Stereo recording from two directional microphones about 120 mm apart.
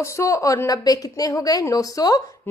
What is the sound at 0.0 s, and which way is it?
A woman's voice, 25° left (ahead or behind).